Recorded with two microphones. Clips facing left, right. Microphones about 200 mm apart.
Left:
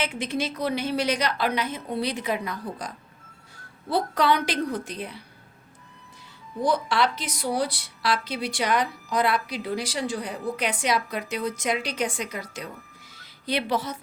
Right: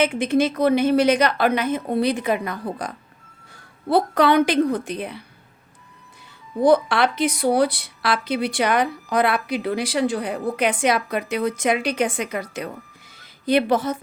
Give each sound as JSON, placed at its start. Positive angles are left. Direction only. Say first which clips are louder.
{"t": 0.0, "sound": "a woman's voice", "louder": "right 9 dB", "side_deg": -55}
{"t": 6.6, "sound": "a woman's voice", "louder": "right 7 dB", "side_deg": -55}